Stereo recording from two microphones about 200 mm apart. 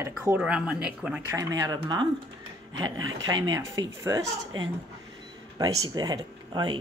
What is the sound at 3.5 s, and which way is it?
Speech, 20° right (ahead or behind).